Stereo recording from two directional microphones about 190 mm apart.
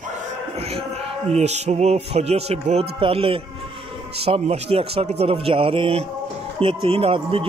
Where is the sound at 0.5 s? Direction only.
30° right (ahead or behind).